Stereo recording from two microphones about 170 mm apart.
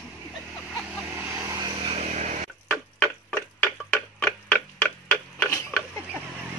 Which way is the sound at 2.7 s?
5° left (ahead or behind).